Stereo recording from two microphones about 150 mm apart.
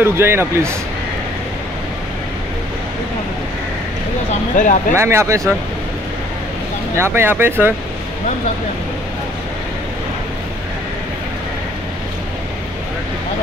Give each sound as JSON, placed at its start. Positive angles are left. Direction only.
{"t": 0.0, "sound": "speech", "side_deg": -15}
{"t": 4.6, "sound": "speech", "side_deg": 60}
{"t": 4.9, "sound": "speech", "side_deg": -15}
{"t": 7.0, "sound": "speech", "side_deg": -15}